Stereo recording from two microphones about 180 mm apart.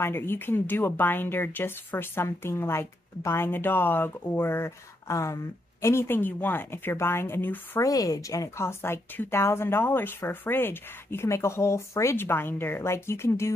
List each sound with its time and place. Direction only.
0.0 s speech: 15° left (ahead or behind)